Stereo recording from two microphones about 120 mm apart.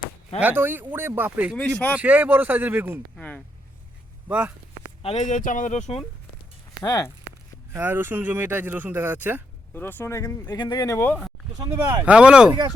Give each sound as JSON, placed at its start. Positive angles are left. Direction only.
{"t": 0.3, "sound": "speech", "side_deg": -15}
{"t": 3.2, "sound": "speech", "side_deg": 10}
{"t": 4.3, "sound": "speech", "side_deg": -10}
{"t": 5.0, "sound": "speech", "side_deg": 70}
{"t": 6.8, "sound": "speech", "side_deg": 30}
{"t": 7.7, "sound": "speech", "side_deg": -15}
{"t": 9.7, "sound": "speech", "side_deg": 15}
{"t": 10.5, "sound": "speech", "side_deg": 35}
{"t": 10.9, "sound": "speech", "side_deg": 20}
{"t": 11.6, "sound": "speech", "side_deg": -35}
{"t": 12.0, "sound": "speech", "side_deg": -10}